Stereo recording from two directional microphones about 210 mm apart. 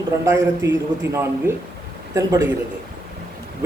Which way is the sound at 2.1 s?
15° right (ahead or behind).